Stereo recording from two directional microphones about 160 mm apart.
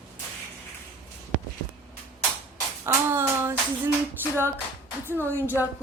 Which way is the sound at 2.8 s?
15° right (ahead or behind).